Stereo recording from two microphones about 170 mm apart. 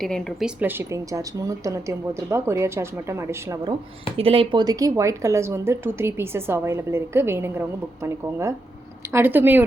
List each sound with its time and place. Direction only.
0.0 s speech: centre (ahead or behind); by 3.8 s 20° right (ahead or behind)
4.2 s speech: 30° right (ahead or behind); by 9.6 s 10° right (ahead or behind)